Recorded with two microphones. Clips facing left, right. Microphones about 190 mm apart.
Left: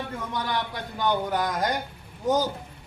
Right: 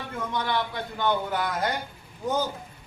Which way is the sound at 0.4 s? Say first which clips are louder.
Right 1 dB; 40° left (ahead or behind).